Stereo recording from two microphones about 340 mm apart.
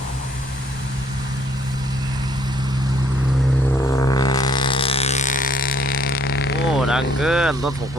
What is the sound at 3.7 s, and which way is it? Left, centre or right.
Didgeridoo, centre.